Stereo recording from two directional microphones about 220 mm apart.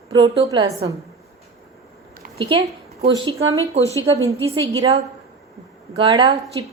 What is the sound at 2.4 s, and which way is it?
A woman's voice, 20° right (ahead or behind).